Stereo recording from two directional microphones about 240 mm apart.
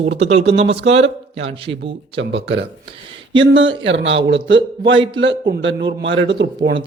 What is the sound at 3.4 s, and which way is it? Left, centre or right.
Speech, right.